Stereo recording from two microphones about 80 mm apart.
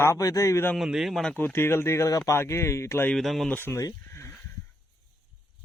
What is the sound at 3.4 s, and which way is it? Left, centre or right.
Speech, left.